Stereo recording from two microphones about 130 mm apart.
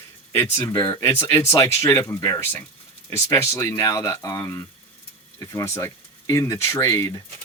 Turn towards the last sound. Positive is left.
turn(degrees=25)  # may be behind; listen again after turning